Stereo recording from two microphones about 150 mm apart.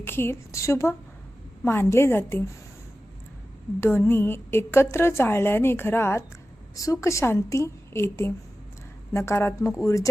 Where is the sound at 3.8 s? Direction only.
15° left (ahead or behind).